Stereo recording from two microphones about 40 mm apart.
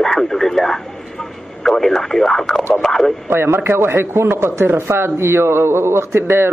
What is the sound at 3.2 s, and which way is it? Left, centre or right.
A man's voice, right.